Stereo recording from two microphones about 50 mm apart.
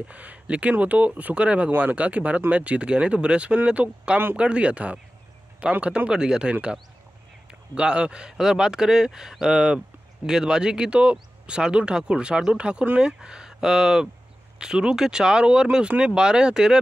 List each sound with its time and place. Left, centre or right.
0.0 s speech: right